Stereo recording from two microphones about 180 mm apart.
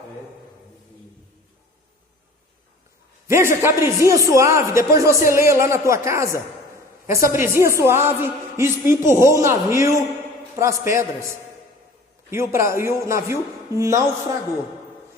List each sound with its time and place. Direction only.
3.2 s a man's voice: 15° right (ahead or behind)